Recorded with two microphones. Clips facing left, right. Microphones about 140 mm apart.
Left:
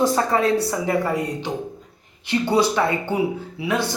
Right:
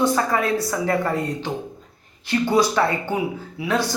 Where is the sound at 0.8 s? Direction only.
10° left (ahead or behind).